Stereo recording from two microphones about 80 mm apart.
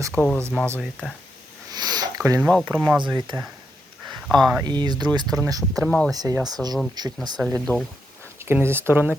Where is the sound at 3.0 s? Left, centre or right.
Right.